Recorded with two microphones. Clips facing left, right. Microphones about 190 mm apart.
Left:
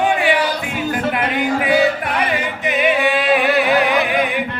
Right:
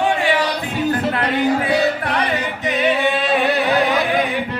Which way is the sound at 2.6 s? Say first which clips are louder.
Left 1 dB; 15° left (ahead or behind).